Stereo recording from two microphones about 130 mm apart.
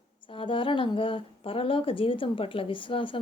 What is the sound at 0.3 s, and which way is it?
Speech, 40° left (ahead or behind).